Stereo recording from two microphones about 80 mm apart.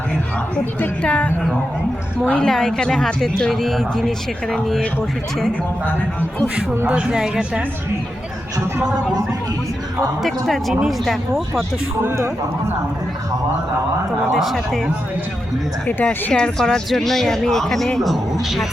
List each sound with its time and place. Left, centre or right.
0.8 s a woman's voice: centre
2.4 s speech: centre
6.8 s speech: centre
10.2 s speech: centre
12.0 s speech: right
14.3 s speech: centre
15.9 s speech: centre